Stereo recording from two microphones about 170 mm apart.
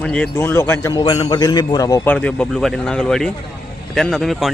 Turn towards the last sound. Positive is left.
turn(degrees=0)  # may be behind; listen again after turning